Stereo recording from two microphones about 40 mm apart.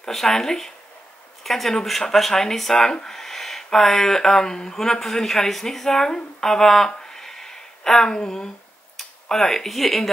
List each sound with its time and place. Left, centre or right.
0.0 s speech: centre
6.9 s a sound: centre
8.9 s speech: centre